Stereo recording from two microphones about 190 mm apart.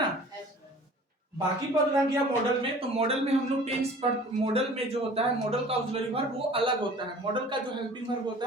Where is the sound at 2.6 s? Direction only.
30° right (ahead or behind).